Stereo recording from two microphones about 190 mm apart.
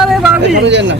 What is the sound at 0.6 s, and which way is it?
Speech, 70° right (ahead or behind).